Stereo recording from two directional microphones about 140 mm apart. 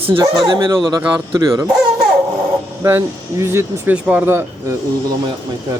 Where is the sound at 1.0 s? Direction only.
15° right (ahead or behind).